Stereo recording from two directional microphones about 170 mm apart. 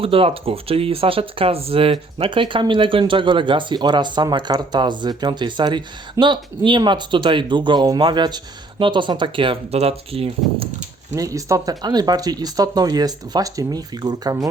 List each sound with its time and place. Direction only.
0.0 s speech: 35° right (ahead or behind)
11.1 s speech: 20° right (ahead or behind)